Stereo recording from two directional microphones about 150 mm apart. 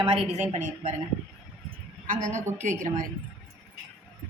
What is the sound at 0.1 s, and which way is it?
Speech, 45° right (ahead or behind).